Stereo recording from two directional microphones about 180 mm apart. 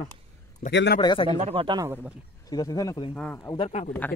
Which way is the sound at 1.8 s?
10° right (ahead or behind).